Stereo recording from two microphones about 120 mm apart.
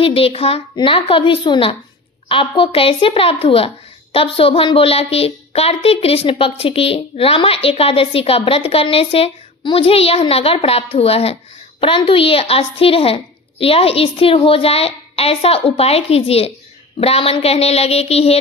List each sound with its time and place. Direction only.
0.0 s a woman's voice: 50° left (ahead or behind)